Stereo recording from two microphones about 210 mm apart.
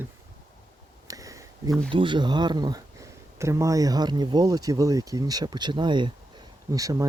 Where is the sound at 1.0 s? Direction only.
15° right (ahead or behind).